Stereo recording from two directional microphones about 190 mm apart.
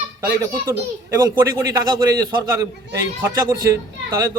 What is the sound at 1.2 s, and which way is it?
A man's voice, 20° right (ahead or behind).